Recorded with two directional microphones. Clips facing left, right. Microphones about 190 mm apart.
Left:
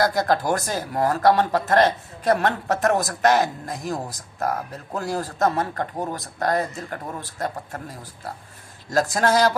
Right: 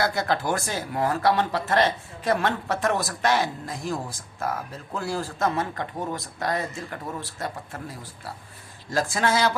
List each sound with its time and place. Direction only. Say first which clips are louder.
0.0 s speech: left 4 dB; 40° left (ahead or behind)